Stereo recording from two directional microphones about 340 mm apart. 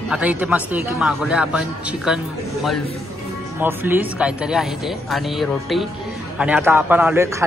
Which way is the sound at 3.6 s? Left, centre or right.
Centre.